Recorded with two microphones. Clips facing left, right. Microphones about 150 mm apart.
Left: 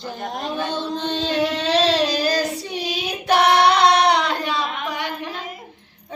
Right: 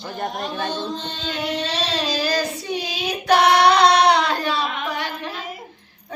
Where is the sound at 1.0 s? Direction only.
70° left (ahead or behind); by 2.3 s 55° left (ahead or behind).